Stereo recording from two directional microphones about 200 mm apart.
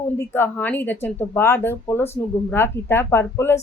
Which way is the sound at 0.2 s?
10° left (ahead or behind).